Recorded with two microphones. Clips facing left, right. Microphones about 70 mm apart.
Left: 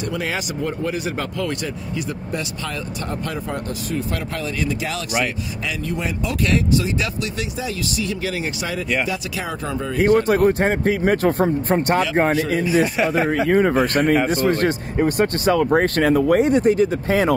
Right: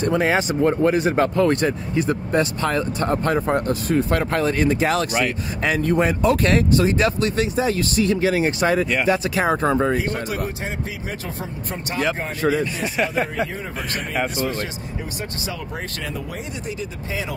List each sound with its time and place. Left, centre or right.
0.0 s speech: right
4.6 s speech: right
9.9 s speech: left
12.8 s speech: centre
14.4 s speech: left